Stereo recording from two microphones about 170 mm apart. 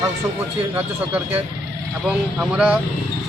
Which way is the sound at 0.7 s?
10° right (ahead or behind).